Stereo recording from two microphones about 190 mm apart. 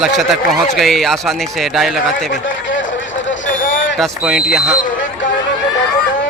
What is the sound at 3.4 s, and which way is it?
Vehicle, 45° left (ahead or behind).